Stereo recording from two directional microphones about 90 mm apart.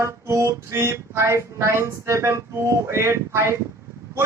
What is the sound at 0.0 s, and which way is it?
Music, 35° right (ahead or behind).